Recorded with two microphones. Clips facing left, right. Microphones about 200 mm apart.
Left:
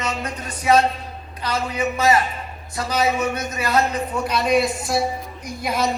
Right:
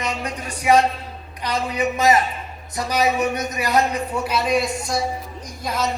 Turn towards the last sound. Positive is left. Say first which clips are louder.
# left 2 dB
turn(degrees=10)  # may be behind; listen again after turning